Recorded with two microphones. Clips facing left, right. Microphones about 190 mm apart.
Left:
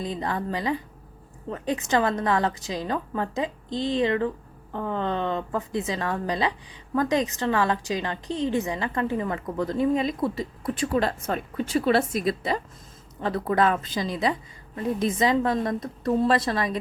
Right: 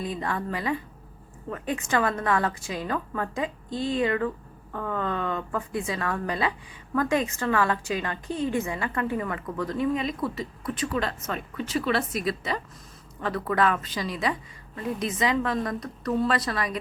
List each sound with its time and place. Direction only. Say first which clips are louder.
0.0 s a woman's voice: left 1 dB; 25° left (ahead or behind)